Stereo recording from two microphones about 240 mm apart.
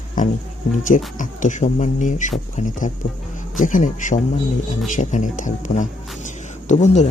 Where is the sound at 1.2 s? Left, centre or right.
Left.